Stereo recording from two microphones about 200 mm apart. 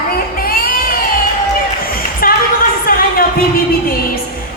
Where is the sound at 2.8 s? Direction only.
45° left (ahead or behind).